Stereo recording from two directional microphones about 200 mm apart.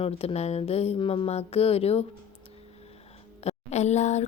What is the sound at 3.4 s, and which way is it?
Speech, 35° left (ahead or behind).